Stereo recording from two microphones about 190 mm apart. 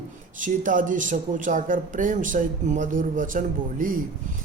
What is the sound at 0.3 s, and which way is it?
Music, 45° right (ahead or behind).